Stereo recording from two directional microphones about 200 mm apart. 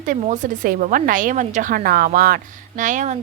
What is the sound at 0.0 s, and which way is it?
A woman's voice, 40° right (ahead or behind).